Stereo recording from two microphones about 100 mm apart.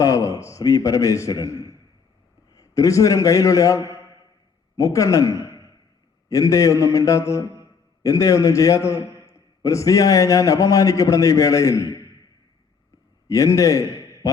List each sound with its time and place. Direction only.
0.0 s a man's voice: 35° left (ahead or behind)
2.6 s a man's voice: 35° left (ahead or behind)
13.2 s a man's voice: 35° left (ahead or behind)